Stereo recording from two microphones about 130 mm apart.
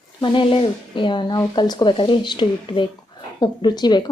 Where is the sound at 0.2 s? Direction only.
40° left (ahead or behind).